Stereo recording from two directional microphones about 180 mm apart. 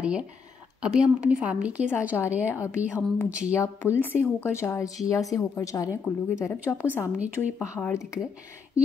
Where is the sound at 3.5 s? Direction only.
15° left (ahead or behind).